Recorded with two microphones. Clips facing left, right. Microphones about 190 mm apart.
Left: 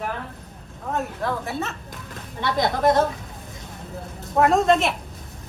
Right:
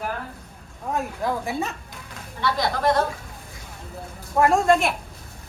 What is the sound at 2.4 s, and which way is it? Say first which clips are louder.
Speech: left 2 dB; 20° left (ahead or behind).